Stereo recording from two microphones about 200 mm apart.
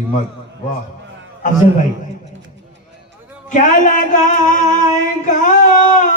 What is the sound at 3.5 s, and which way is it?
A man's voice, 40° left (ahead or behind).